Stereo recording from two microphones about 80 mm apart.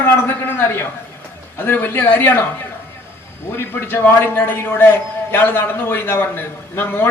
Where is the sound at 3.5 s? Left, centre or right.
Left.